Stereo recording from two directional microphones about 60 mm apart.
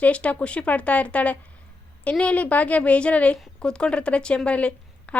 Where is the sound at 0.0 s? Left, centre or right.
Left.